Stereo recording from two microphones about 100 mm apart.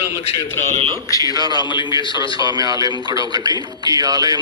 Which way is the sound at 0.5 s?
25° left (ahead or behind).